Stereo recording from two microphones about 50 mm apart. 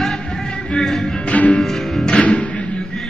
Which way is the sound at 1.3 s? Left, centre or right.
Left.